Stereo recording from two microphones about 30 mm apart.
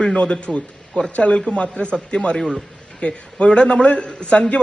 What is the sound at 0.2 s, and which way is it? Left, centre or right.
A man's voice, left.